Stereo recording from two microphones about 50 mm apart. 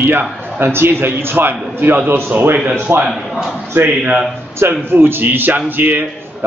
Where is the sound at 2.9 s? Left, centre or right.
Right.